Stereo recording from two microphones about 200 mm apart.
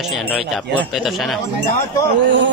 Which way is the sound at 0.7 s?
Centre (ahead or behind).